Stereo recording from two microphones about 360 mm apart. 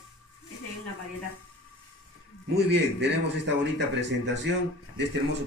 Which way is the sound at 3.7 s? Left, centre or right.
Right.